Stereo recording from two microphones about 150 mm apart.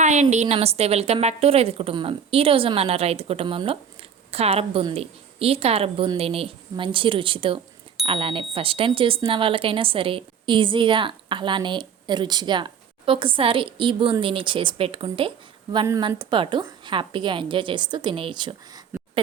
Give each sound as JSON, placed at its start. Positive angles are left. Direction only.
{"t": 0.0, "sound": "speech", "side_deg": -50}